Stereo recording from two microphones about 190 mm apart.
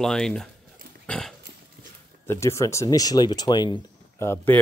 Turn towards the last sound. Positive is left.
turn(degrees=10)  # may be behind; listen again after turning